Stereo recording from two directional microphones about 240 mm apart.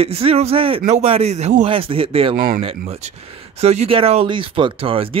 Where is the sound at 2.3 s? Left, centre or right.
Right.